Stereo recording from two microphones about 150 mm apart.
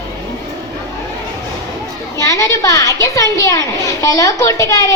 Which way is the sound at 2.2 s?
20° left (ahead or behind).